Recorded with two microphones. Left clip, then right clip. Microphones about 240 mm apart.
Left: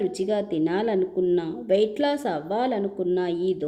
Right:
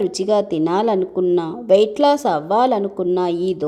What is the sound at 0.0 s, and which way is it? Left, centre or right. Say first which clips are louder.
A woman's voice: right 7 dB; centre.